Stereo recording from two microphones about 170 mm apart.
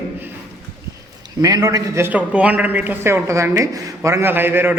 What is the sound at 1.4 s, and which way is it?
A man's voice, 20° right (ahead or behind).